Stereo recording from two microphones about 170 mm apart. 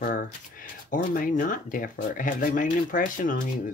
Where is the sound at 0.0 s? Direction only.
50° left (ahead or behind).